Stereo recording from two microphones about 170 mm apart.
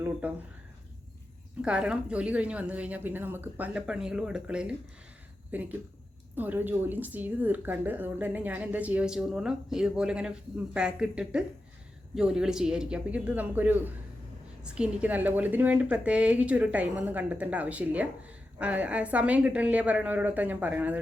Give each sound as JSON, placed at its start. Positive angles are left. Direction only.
{"t": 0.2, "sound": "a woman's voice", "side_deg": -10}
{"t": 1.6, "sound": "a woman's voice", "side_deg": -5}